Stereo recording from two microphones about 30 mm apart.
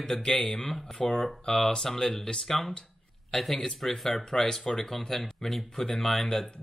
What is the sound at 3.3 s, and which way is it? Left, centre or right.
Speech, centre.